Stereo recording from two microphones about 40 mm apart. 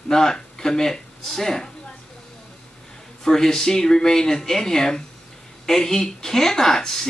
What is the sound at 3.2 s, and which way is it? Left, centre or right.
Speech, centre.